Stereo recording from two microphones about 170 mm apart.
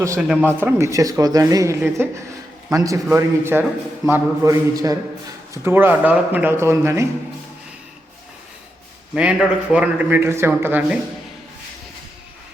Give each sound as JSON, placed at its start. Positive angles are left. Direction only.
{"t": 0.2, "sound": "speech", "side_deg": -10}
{"t": 4.4, "sound": "a sound", "side_deg": -20}
{"t": 5.6, "sound": "speech", "side_deg": -10}
{"t": 9.1, "sound": "speech", "side_deg": -5}